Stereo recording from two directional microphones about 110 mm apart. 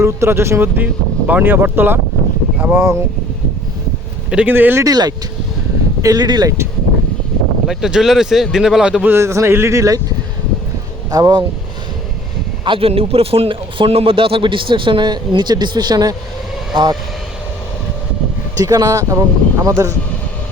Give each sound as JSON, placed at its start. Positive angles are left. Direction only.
{"t": 0.0, "sound": "speech", "side_deg": -25}
{"t": 4.3, "sound": "speech", "side_deg": -15}
{"t": 4.8, "sound": "speech", "side_deg": -35}
{"t": 7.7, "sound": "speech", "side_deg": -5}
{"t": 9.1, "sound": "speech", "side_deg": -25}
{"t": 11.1, "sound": "speech", "side_deg": -40}
{"t": 12.6, "sound": "a man's voice", "side_deg": -55}
{"t": 18.5, "sound": "speech", "side_deg": -35}